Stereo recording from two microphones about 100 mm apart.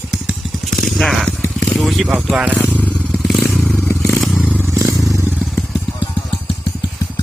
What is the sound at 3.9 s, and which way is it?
Scrape, 25° left (ahead or behind).